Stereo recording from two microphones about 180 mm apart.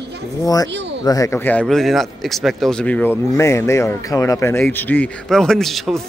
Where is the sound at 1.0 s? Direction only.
20° left (ahead or behind).